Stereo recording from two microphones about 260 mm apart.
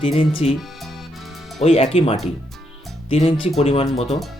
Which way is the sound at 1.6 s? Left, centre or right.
Left.